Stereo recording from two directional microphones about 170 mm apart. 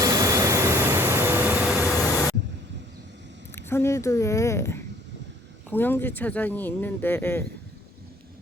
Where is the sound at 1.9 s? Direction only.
20° left (ahead or behind).